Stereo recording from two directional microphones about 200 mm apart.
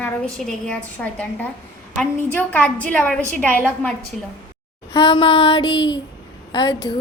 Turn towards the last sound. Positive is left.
turn(degrees=25)  # may be behind; listen again after turning